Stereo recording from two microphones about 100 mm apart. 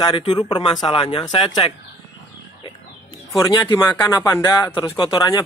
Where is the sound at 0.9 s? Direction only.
65° left (ahead or behind); by 1.6 s 45° left (ahead or behind).